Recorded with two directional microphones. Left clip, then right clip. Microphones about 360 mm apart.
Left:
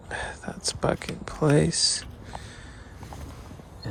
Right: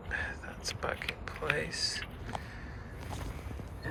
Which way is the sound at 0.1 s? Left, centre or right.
Centre.